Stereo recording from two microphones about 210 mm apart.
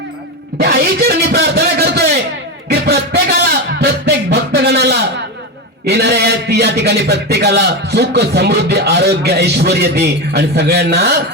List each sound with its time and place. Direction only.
0.6 s a man's voice: 50° right (ahead or behind)